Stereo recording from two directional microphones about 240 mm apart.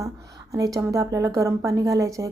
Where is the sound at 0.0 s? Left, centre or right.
Centre.